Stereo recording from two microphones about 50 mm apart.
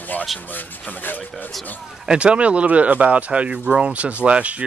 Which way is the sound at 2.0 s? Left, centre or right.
Right.